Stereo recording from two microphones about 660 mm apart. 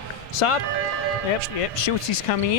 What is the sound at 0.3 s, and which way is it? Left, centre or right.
Speech, left.